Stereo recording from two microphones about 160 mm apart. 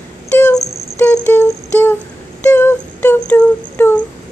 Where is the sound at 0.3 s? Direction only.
15° left (ahead or behind).